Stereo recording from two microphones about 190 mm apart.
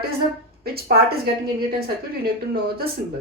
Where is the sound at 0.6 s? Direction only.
55° right (ahead or behind).